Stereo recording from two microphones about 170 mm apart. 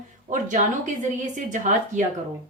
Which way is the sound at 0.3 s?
50° right (ahead or behind).